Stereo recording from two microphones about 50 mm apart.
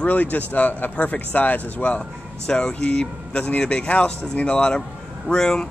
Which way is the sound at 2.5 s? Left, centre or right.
Centre.